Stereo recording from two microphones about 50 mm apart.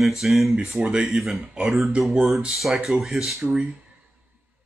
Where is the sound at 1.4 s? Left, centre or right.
Centre.